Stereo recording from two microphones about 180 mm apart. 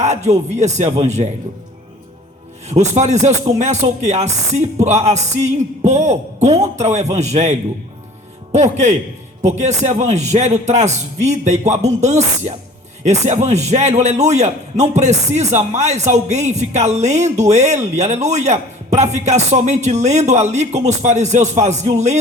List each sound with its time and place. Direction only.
0.0 s a man's voice: 40° right (ahead or behind)
2.6 s a man's voice: 40° right (ahead or behind)
8.5 s a man's voice: 40° right (ahead or behind)